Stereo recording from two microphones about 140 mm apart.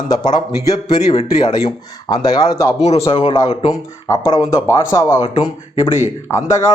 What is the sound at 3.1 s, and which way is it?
Speech, 35° left (ahead or behind).